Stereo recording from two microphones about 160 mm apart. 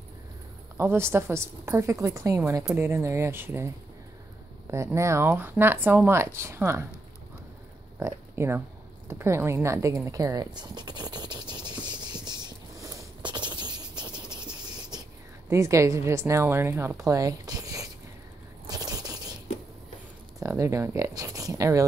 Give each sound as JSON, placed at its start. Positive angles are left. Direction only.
{"t": 0.7, "sound": "speech", "side_deg": -15}
{"t": 8.0, "sound": "a sound", "side_deg": -15}
{"t": 15.5, "sound": "a woman's voice", "side_deg": -20}
{"t": 18.7, "sound": "scrape", "side_deg": -25}
{"t": 20.4, "sound": "a woman's voice", "side_deg": -20}